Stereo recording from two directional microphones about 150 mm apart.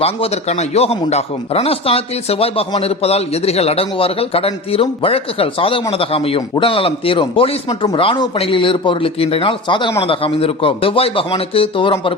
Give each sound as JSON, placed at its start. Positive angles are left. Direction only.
{"t": 0.0, "sound": "speech", "side_deg": 45}